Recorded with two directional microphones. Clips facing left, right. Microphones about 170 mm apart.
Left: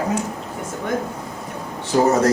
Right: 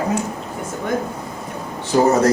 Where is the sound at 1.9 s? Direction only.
25° right (ahead or behind).